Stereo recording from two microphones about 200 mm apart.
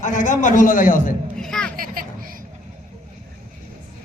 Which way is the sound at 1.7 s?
45° right (ahead or behind).